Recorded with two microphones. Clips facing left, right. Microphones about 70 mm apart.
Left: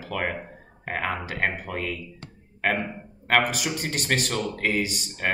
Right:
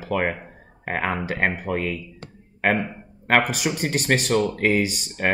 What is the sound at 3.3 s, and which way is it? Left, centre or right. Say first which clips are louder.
Speech: right 3 dB; right.